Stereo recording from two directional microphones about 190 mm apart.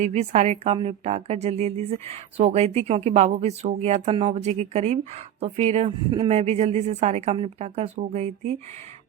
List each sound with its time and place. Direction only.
0.0 s a woman's voice: 35° right (ahead or behind)